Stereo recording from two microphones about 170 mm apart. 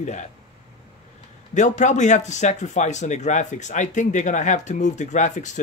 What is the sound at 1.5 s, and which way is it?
Speech, 45° left (ahead or behind).